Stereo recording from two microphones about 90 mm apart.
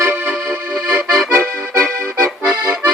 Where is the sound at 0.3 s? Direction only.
10° right (ahead or behind).